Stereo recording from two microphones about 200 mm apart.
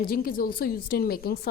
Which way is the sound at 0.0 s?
45° left (ahead or behind).